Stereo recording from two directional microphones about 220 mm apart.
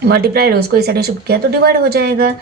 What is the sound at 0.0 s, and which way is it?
A woman's voice, 45° right (ahead or behind).